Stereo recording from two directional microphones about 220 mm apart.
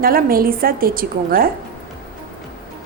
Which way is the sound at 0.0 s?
40° right (ahead or behind).